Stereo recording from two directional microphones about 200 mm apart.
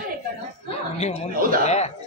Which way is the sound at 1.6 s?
35° left (ahead or behind).